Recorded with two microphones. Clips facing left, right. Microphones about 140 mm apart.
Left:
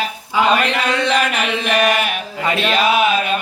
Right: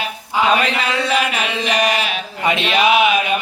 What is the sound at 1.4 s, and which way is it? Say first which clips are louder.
Chant: left 2 dB; 55° left (ahead or behind).